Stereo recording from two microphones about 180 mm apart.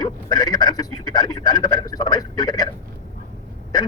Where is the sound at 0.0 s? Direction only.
25° left (ahead or behind).